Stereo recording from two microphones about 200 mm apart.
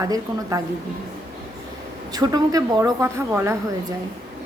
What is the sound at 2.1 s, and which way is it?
A woman's voice, 20° right (ahead or behind).